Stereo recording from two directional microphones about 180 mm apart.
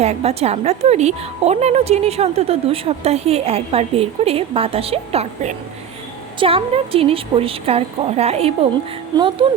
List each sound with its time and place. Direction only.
0.0 s a woman's voice: 35° right (ahead or behind)